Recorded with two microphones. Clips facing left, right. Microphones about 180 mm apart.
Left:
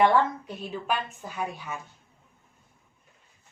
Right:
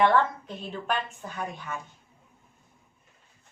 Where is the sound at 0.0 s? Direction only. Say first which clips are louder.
Left 1 dB; 10° left (ahead or behind).